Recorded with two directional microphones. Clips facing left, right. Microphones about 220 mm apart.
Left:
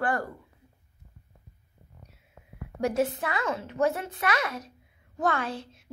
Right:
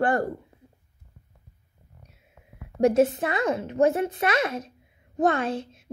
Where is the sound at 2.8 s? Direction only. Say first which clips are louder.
Right 7 dB; 20° right (ahead or behind).